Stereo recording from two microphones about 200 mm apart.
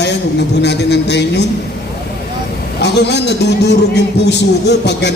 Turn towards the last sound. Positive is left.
turn(degrees=60)  # may be behind; listen again after turning